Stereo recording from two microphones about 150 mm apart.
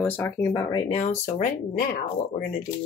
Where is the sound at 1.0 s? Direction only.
50° left (ahead or behind).